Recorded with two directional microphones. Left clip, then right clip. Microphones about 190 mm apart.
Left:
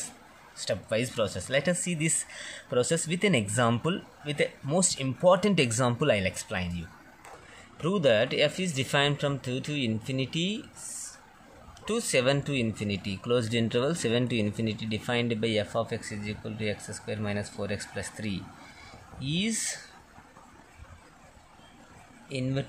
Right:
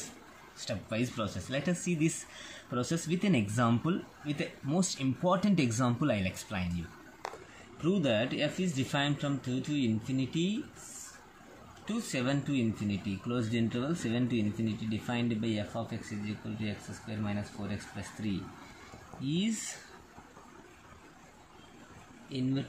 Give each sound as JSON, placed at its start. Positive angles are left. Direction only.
{"t": 0.6, "sound": "speech", "side_deg": 40}
{"t": 7.8, "sound": "speech", "side_deg": 45}
{"t": 11.8, "sound": "speech", "side_deg": 45}